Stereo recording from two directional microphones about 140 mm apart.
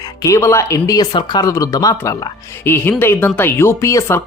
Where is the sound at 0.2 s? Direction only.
20° left (ahead or behind).